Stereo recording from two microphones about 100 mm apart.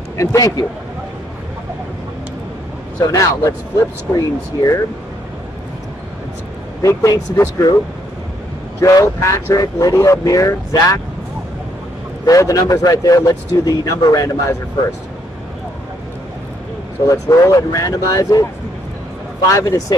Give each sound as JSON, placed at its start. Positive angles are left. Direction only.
{"t": 0.2, "sound": "speech", "side_deg": 35}
{"t": 3.0, "sound": "speech", "side_deg": 35}
{"t": 6.8, "sound": "speech", "side_deg": 35}
{"t": 8.8, "sound": "speech", "side_deg": 30}
{"t": 12.3, "sound": "speech", "side_deg": 35}
{"t": 17.1, "sound": "speech", "side_deg": 35}
{"t": 19.4, "sound": "speech", "side_deg": 30}